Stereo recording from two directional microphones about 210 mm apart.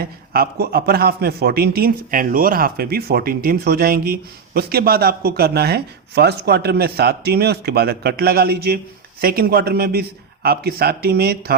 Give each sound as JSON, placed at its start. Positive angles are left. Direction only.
{"t": 0.0, "sound": "a man's voice", "side_deg": -45}